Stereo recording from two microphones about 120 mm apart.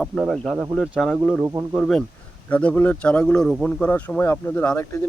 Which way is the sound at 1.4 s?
20° right (ahead or behind).